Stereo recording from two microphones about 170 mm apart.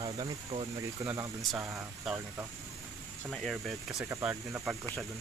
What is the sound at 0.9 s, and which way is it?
Speech, 20° right (ahead or behind).